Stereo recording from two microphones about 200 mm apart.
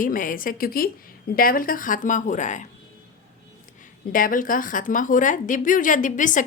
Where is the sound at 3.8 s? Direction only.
45° left (ahead or behind).